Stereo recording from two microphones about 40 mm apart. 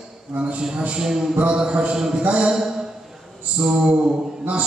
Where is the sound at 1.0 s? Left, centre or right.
Centre.